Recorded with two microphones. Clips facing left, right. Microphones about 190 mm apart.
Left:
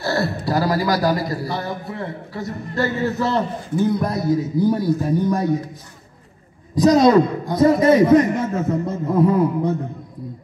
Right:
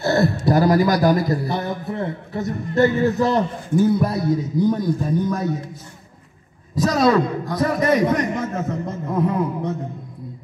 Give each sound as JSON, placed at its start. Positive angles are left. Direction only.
{"t": 0.0, "sound": "a man's voice", "side_deg": -20}
{"t": 6.9, "sound": "a man's voice", "side_deg": 20}
{"t": 9.1, "sound": "a sound", "side_deg": 30}